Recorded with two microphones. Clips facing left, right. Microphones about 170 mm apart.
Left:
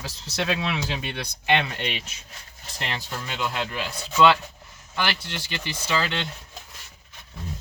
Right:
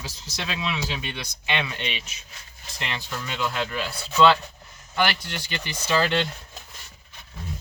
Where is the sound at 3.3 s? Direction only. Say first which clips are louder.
Right 1 dB; 20° left (ahead or behind).